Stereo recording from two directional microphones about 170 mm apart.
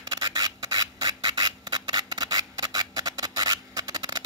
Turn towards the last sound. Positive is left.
turn(degrees=-25)  # may be behind; listen again after turning